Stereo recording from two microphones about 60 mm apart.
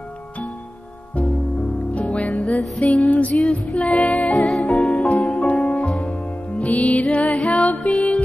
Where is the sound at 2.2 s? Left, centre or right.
Centre.